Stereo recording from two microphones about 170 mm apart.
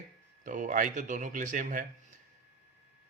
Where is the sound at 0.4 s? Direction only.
50° right (ahead or behind).